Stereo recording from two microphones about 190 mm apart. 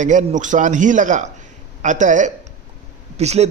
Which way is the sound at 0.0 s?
40° right (ahead or behind).